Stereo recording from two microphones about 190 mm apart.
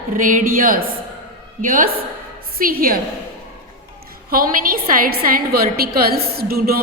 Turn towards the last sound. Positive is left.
turn(degrees=-50)  # may be behind; listen again after turning